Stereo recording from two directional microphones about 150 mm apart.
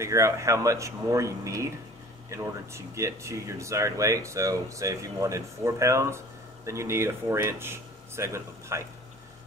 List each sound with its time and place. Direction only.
0.0 s speech: 20° right (ahead or behind)